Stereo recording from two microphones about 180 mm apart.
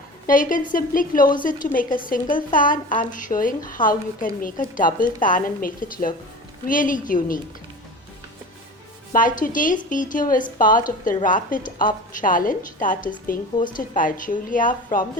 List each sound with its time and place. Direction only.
0.3 s a woman's voice: 50° left (ahead or behind)
9.1 s a woman's voice: 50° left (ahead or behind)